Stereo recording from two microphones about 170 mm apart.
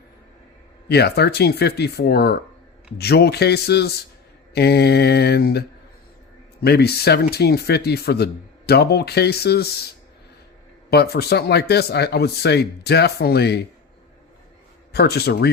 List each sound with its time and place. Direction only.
0.9 s speech: 75° left (ahead or behind)
10.8 s speech: 70° left (ahead or behind)
14.9 s speech: 70° left (ahead or behind)